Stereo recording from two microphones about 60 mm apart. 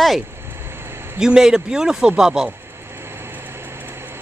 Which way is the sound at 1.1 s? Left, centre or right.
Centre.